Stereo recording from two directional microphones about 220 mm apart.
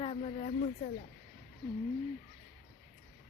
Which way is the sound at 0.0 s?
30° left (ahead or behind).